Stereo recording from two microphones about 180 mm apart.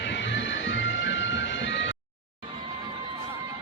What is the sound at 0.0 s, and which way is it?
Music, 75° left (ahead or behind).